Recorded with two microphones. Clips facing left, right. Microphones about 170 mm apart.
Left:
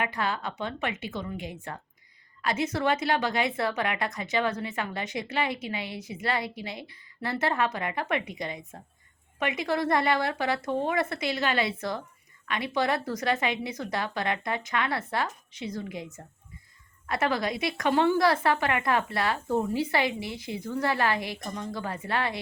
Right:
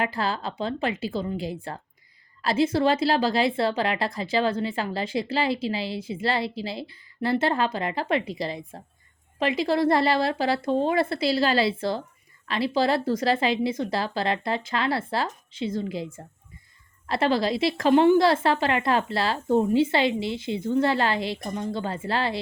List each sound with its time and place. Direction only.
0.0 s a woman's voice: 30° right (ahead or behind)